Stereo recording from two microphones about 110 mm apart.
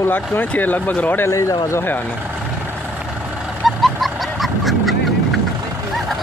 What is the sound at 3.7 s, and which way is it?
Goose, centre (ahead or behind).